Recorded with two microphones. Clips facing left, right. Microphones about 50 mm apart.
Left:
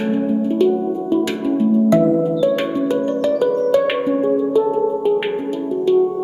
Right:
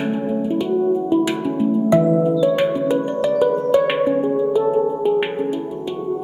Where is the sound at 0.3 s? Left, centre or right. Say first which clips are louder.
Left 5 dB; centre.